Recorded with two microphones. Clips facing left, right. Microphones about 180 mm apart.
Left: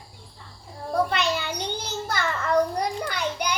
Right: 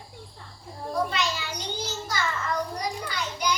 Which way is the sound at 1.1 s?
60° left (ahead or behind).